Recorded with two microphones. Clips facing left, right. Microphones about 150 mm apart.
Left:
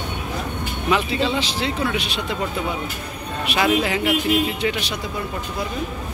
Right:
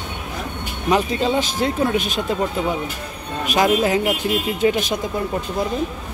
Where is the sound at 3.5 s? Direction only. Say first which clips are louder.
Right 3 dB; 40° right (ahead or behind).